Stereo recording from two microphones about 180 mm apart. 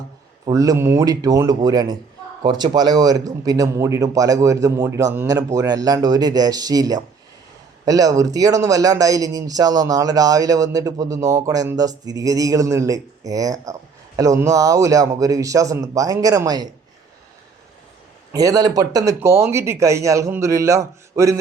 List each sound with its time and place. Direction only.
0.4 s speech: 20° right (ahead or behind)
18.3 s speech: 20° right (ahead or behind)